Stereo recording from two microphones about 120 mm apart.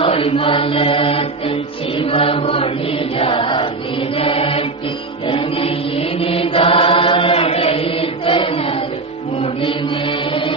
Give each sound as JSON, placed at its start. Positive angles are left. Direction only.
{"t": 0.0, "sound": "music", "side_deg": 50}
{"t": 4.2, "sound": "mantra", "side_deg": 50}
{"t": 5.3, "sound": "chant", "side_deg": 50}